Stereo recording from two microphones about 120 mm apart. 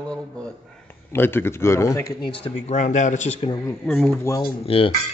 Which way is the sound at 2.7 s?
90° left.